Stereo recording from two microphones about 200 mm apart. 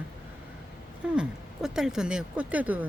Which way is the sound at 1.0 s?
5° right (ahead or behind).